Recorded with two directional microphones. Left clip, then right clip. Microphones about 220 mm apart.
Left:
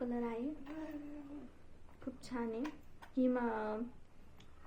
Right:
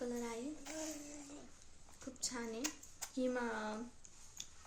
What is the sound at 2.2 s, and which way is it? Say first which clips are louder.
A woman's voice: left 1 dB; 5° right (ahead or behind).